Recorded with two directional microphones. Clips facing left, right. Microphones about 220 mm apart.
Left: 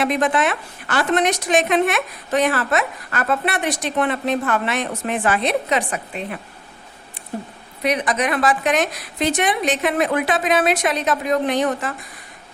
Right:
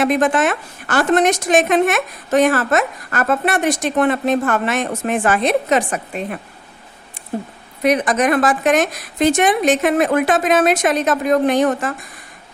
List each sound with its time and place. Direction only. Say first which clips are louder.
0.0 s a woman's voice: right 3 dB; 45° right (ahead or behind)
7.8 s a woman's voice: right 5 dB; 45° right (ahead or behind)